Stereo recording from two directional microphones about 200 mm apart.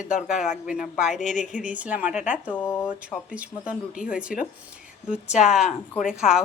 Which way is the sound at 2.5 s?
10° left (ahead or behind).